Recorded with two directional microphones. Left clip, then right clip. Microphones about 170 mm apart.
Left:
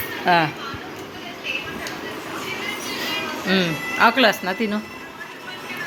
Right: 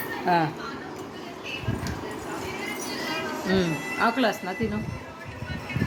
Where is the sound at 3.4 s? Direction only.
5° right (ahead or behind).